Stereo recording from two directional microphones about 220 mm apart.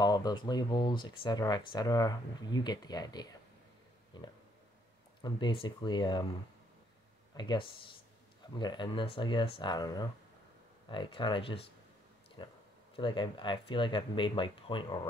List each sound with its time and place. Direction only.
0.0 s speech: 20° left (ahead or behind)
7.3 s speech: 20° left (ahead or behind)